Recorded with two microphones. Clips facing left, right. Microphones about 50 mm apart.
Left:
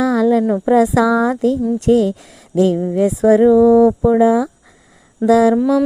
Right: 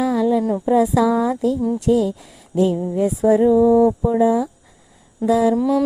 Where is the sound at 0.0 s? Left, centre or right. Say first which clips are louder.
Left 4 dB; left.